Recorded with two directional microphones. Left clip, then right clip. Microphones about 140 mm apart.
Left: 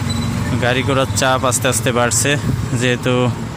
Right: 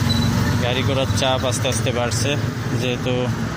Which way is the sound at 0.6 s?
80° left.